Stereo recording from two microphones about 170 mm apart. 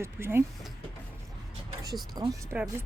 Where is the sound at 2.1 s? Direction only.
20° right (ahead or behind).